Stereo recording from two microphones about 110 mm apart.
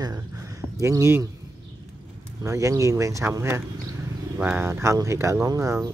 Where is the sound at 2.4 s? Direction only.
25° right (ahead or behind).